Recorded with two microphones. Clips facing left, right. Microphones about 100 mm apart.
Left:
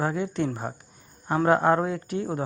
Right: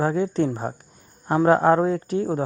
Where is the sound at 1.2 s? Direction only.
20° right (ahead or behind).